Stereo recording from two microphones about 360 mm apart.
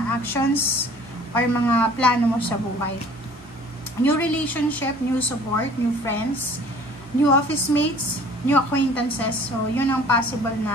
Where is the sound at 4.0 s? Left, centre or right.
Centre.